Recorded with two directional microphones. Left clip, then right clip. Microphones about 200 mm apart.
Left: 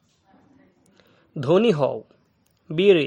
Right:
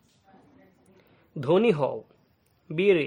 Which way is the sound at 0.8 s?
20° left (ahead or behind).